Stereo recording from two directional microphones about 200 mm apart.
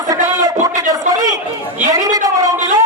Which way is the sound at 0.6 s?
15° right (ahead or behind).